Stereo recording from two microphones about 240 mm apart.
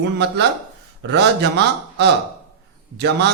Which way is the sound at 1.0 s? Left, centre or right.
Right.